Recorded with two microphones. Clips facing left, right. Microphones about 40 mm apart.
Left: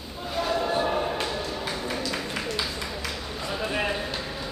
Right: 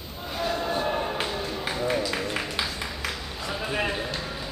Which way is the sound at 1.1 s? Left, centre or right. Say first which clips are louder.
Even; centre.